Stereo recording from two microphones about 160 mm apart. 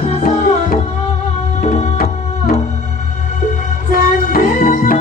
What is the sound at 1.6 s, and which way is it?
Music, 45° left (ahead or behind).